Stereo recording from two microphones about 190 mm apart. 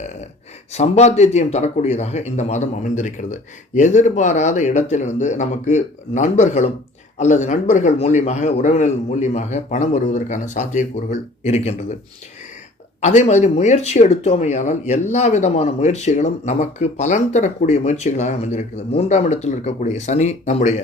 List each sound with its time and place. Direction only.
0.7 s speech: 35° left (ahead or behind)
13.0 s speech: 40° left (ahead or behind)